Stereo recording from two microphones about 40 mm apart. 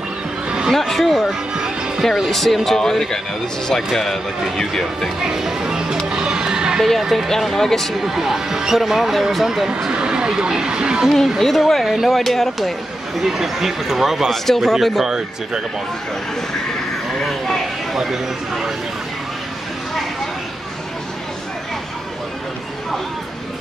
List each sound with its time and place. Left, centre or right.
0.7 s speech: centre
2.3 s speech: centre
5.2 s speech: centre
6.0 s music: centre
6.8 s speech: centre
8.0 s speech: centre
9.8 s speech: centre
11.1 s speech: centre
11.8 s speech: centre
14.3 s speech: centre
15.0 s speech: centre
17.2 s speech: centre